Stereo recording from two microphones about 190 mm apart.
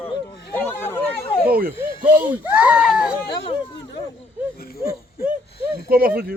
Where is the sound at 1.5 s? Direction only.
50° right (ahead or behind).